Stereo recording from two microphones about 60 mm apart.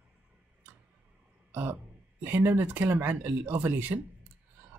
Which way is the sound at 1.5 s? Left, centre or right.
Right.